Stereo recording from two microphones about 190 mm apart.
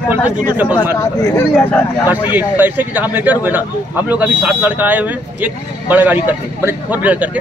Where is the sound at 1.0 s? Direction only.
15° left (ahead or behind).